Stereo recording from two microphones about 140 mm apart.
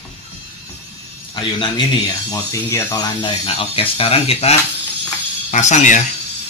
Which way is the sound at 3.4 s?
40° left (ahead or behind).